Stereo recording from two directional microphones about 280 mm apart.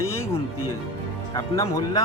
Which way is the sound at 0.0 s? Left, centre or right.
Centre.